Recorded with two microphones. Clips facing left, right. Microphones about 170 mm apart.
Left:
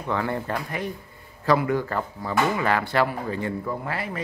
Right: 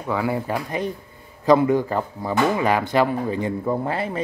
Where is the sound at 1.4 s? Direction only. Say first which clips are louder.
Right 5 dB; 20° right (ahead or behind).